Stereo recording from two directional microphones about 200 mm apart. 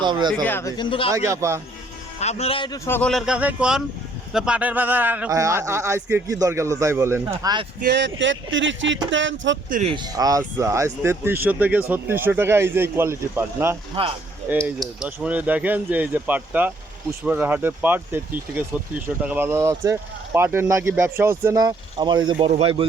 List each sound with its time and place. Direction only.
0.0 s a man's voice: 20° right (ahead or behind)
0.4 s speech: 10° left (ahead or behind)
0.8 s a man's voice: 25° left (ahead or behind)
1.1 s speech: 15° right (ahead or behind)
2.1 s speech: 35° left (ahead or behind); by 7.7 s 20° right (ahead or behind)
7.8 s speech: 55° right (ahead or behind)
8.5 s a sound: 70° right (ahead or behind)
9.6 s speech: 40° right (ahead or behind)
9.9 s speech: 20° right (ahead or behind)
14.0 s a man's voice: 30° right (ahead or behind)
14.8 s speech: 5° right (ahead or behind); by 22.9 s 25° right (ahead or behind)